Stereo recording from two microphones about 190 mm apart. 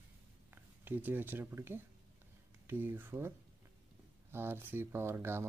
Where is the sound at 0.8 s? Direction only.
10° right (ahead or behind).